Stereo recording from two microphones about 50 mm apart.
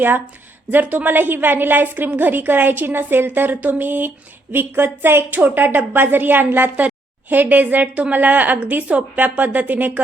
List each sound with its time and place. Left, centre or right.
0.7 s a woman's voice: right